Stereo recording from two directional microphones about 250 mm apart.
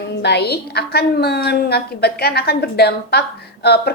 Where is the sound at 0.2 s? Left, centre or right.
Left.